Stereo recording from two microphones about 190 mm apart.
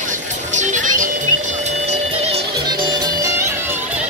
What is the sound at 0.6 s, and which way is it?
Music, 40° right (ahead or behind).